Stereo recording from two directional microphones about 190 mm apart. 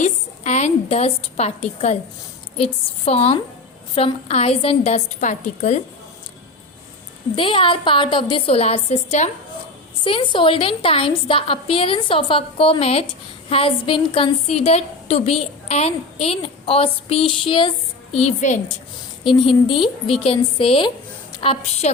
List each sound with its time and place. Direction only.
0.0 s a woman's voice: 40° left (ahead or behind)
7.3 s a woman's voice: 25° left (ahead or behind)
18.2 s a woman's voice: 40° left (ahead or behind)
19.2 s a woman's voice: 25° left (ahead or behind)